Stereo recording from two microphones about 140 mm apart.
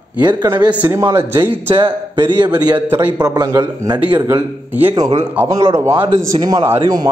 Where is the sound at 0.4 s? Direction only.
30° right (ahead or behind).